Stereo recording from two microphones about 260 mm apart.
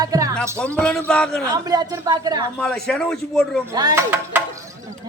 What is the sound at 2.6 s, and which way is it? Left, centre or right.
A man's voice, centre.